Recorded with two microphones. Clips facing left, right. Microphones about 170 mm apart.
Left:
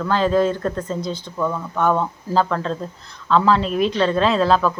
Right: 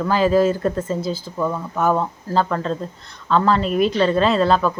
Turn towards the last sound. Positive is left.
turn(degrees=0)  # may be behind; listen again after turning